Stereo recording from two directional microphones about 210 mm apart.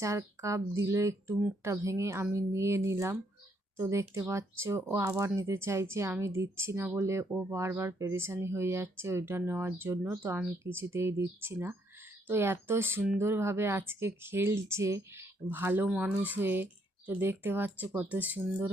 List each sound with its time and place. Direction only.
0.0 s speech: 15° right (ahead or behind)